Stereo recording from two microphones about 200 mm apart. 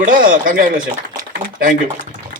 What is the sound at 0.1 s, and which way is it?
Speech, 40° right (ahead or behind).